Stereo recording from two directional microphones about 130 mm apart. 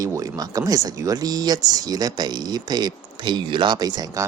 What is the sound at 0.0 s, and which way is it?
Speech, 25° right (ahead or behind).